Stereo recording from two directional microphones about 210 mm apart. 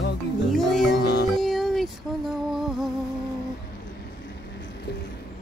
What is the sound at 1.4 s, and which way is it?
Music, centre (ahead or behind).